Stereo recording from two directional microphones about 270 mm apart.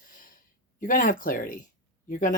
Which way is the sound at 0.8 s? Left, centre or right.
Left.